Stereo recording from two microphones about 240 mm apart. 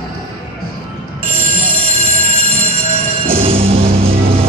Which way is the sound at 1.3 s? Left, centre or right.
Right.